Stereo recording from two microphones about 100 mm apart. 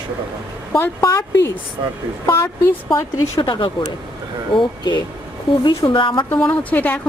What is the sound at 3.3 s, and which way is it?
Speech, 60° left (ahead or behind).